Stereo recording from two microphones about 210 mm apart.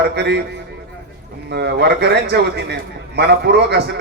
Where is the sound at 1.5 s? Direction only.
50° right (ahead or behind).